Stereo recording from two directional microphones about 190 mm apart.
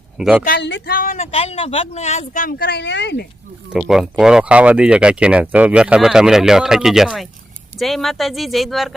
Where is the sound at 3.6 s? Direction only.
5° right (ahead or behind).